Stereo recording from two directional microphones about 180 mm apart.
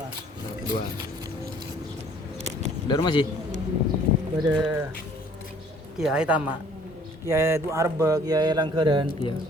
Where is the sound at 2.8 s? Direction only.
25° left (ahead or behind).